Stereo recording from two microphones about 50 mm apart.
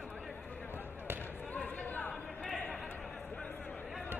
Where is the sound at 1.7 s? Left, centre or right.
Left.